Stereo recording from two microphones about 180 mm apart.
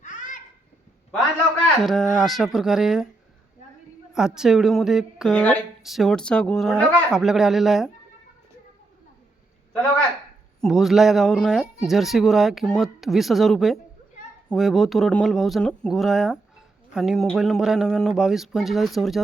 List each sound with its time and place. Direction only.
0.0 s a sound: 45° left (ahead or behind)
1.6 s speech: centre (ahead or behind)
4.1 s speech: 5° right (ahead or behind)
10.6 s speech: centre (ahead or behind)